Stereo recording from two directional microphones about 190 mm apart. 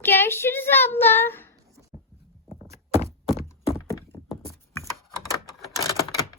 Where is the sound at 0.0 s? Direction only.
10° left (ahead or behind).